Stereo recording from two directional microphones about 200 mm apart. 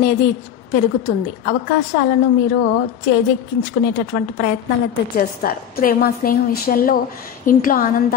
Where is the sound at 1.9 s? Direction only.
55° left (ahead or behind).